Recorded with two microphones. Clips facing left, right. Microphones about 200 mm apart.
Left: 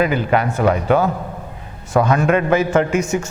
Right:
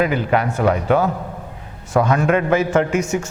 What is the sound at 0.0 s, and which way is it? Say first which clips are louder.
A man's voice: left 1 dB; 15° left (ahead or behind).